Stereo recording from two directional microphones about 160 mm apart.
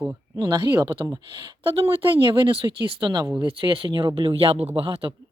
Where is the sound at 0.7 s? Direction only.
10° right (ahead or behind).